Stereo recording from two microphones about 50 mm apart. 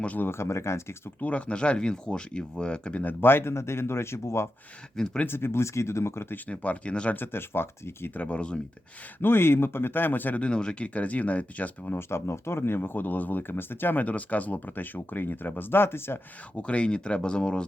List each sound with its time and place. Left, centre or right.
0.2 s speech: left
1.2 s speech: left
3.0 s speech: left
4.9 s speech: centre
5.2 s speech: left
6.5 s speech: left
7.2 s speech: left
8.1 s speech: left
9.2 s speech: left
10.4 s speech: centre
11.9 s speech: left
16.6 s speech: left